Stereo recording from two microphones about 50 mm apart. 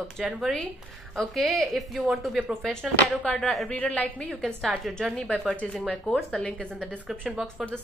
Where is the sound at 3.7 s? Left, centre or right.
Left.